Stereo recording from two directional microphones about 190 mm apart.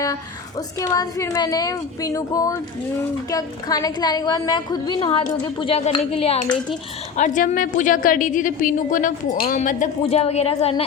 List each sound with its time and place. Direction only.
0.8 s a woman's voice: 20° left (ahead or behind)
7.2 s a woman's voice: 40° left (ahead or behind)